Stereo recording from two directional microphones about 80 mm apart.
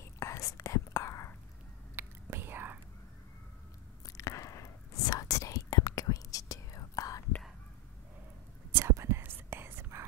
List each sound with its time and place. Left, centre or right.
0.0 s whispering: left
2.0 s whispering: right
4.2 s whispering: left
8.7 s whispering: right